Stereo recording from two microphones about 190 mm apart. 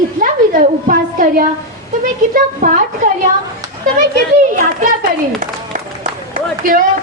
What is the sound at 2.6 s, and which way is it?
Speech, 40° right (ahead or behind).